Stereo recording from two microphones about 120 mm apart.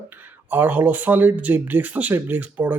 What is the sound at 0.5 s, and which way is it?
Speech, 15° right (ahead or behind).